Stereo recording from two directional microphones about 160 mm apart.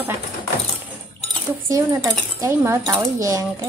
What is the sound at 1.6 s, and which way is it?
Speech, 20° right (ahead or behind).